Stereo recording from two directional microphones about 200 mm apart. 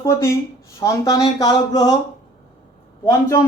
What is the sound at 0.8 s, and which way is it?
Speech, 15° left (ahead or behind).